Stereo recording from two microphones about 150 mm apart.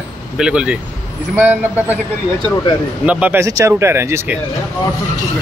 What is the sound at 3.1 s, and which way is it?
Speech, 10° right (ahead or behind).